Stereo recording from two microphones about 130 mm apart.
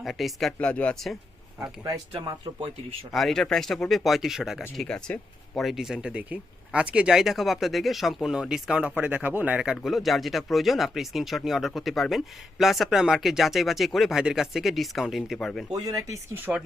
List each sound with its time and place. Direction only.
0.0 s speech: centre (ahead or behind)
1.8 s speech: 30° right (ahead or behind)
3.1 s speech: centre (ahead or behind)
15.7 s speech: 30° right (ahead or behind)
16.5 s speech: 5° right (ahead or behind)